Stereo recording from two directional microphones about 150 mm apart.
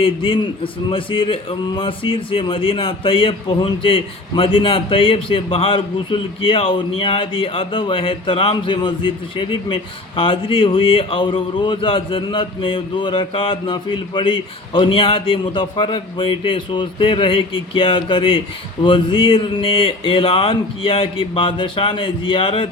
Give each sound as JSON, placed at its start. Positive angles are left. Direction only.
{"t": 0.0, "sound": "a man's voice", "side_deg": 35}